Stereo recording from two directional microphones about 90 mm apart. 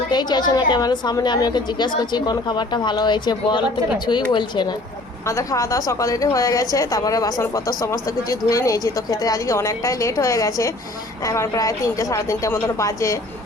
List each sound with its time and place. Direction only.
0.1 s a woman's voice: 55° left (ahead or behind)
5.3 s a woman's voice: 35° left (ahead or behind)